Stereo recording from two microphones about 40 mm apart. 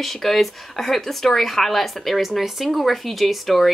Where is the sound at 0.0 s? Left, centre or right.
Centre.